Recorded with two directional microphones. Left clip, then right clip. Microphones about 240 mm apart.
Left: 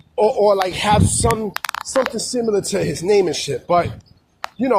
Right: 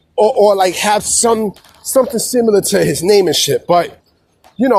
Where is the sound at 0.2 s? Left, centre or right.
Right.